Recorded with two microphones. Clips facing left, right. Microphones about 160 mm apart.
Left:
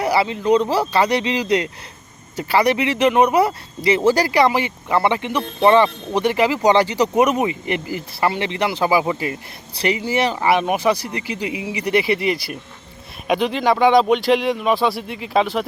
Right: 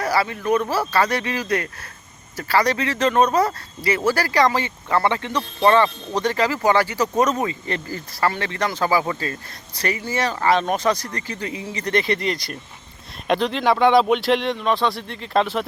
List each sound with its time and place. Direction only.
0.0 s speech: 15° left (ahead or behind)